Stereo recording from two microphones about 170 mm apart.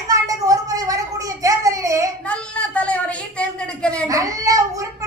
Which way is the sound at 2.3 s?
5° left (ahead or behind).